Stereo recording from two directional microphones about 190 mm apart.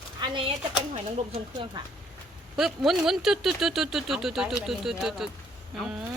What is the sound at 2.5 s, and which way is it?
Speech, centre (ahead or behind).